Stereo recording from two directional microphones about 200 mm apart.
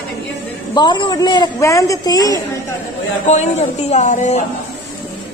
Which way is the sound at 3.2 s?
35° left (ahead or behind).